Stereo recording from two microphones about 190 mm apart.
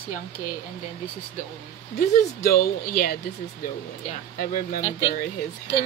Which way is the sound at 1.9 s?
50° left (ahead or behind).